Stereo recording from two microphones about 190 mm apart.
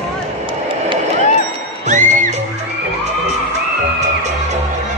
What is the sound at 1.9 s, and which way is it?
Music, 40° right (ahead or behind).